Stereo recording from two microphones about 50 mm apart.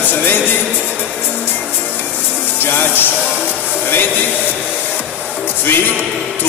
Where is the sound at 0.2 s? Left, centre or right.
Left.